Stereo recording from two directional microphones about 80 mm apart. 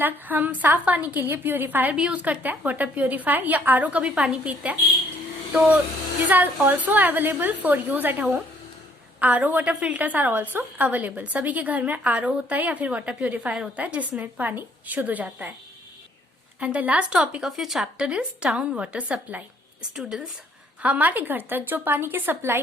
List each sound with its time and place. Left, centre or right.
0.0 s a woman's voice: right
16.6 s a woman's voice: centre
20.0 s speech: centre
20.8 s a woman's voice: centre